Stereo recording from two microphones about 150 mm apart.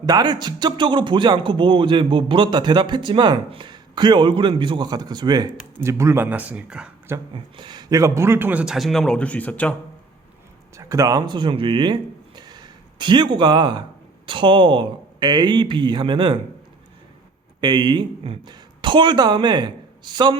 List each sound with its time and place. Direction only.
0.0 s a man's voice: 30° right (ahead or behind); by 7.2 s 5° right (ahead or behind)
7.3 s a man's voice: 30° right (ahead or behind); by 9.7 s 10° left (ahead or behind)
10.8 s a man's voice: 20° right (ahead or behind)
12.4 s a sound: 30° right (ahead or behind)
14.3 s a man's voice: 35° right (ahead or behind)
17.6 s speech: 30° right (ahead or behind)